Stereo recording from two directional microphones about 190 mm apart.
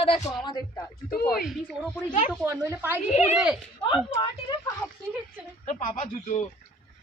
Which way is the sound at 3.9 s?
25° left (ahead or behind).